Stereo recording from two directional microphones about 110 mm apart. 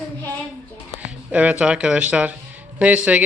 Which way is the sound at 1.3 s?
10° right (ahead or behind).